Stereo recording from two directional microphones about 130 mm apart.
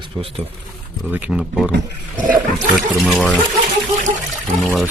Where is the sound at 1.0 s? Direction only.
15° right (ahead or behind).